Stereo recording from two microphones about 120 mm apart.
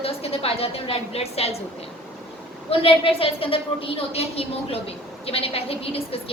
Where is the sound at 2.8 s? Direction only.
50° left (ahead or behind).